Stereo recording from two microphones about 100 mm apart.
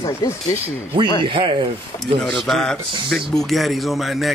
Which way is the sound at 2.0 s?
5° left (ahead or behind).